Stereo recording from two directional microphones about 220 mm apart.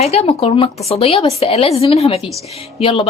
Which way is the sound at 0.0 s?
30° left (ahead or behind).